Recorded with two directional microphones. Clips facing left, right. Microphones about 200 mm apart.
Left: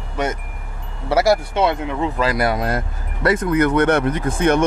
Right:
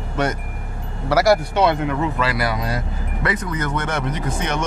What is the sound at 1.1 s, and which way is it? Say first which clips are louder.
Speech: even; 20° left (ahead or behind).